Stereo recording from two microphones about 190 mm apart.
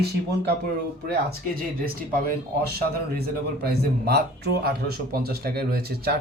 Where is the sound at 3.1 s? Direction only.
55° right (ahead or behind).